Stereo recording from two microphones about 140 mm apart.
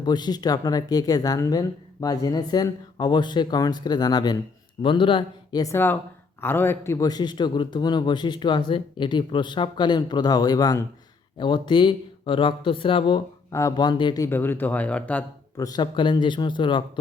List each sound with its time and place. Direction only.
0.0 s speech: 30° left (ahead or behind)
13.5 s speech: 20° left (ahead or behind)
14.3 s speech: 15° left (ahead or behind)
15.5 s speech: 25° left (ahead or behind)